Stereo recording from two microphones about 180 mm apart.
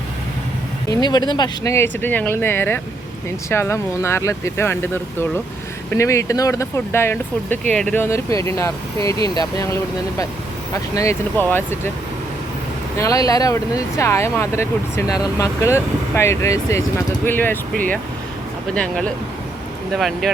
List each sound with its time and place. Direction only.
0.9 s speech: 20° left (ahead or behind)
5.9 s speech: 15° left (ahead or behind)
13.0 s speech: 20° left (ahead or behind)
18.7 s speech: 5° left (ahead or behind)